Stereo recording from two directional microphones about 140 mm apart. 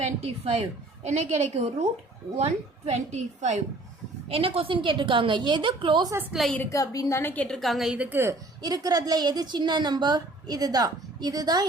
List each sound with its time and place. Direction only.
0.3 s a woman's voice: 45° right (ahead or behind)
4.3 s a woman's voice: 40° right (ahead or behind)
6.3 s a woman's voice: centre (ahead or behind)
6.6 s a woman's voice: 20° left (ahead or behind); by 11.6 s 30° right (ahead or behind)